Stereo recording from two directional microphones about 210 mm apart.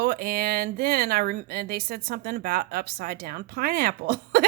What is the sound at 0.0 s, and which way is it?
Speech, 45° right (ahead or behind).